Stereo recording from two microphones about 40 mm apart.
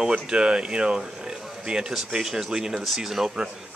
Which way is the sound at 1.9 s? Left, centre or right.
Centre.